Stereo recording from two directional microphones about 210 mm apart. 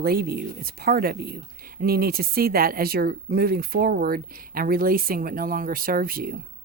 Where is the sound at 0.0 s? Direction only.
45° right (ahead or behind).